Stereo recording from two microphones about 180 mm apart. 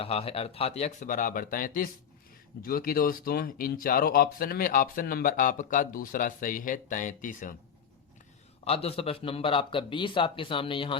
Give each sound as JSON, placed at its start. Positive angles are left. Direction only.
{"t": 0.0, "sound": "speech", "side_deg": 35}
{"t": 8.6, "sound": "a man's voice", "side_deg": 35}